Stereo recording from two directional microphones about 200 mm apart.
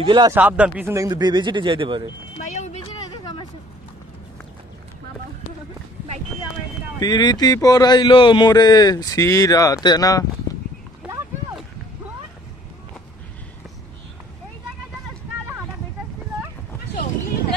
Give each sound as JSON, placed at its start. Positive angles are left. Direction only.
{"t": 0.0, "sound": "speech", "side_deg": -25}
{"t": 0.3, "sound": "speech", "side_deg": -10}
{"t": 2.4, "sound": "a sound", "side_deg": 35}
{"t": 7.0, "sound": "a man's voice", "side_deg": 20}